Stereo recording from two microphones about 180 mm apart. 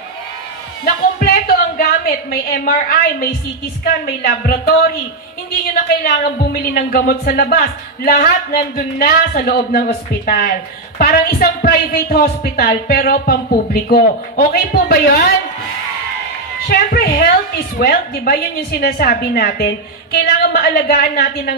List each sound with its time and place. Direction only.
0.8 s speech: 55° left (ahead or behind)
6.0 s speech: 60° left (ahead or behind)
16.6 s speech: 60° left (ahead or behind)